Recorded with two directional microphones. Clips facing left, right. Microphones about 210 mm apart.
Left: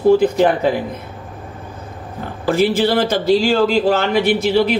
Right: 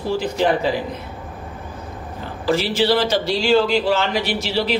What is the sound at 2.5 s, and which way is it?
Speech, 50° left (ahead or behind).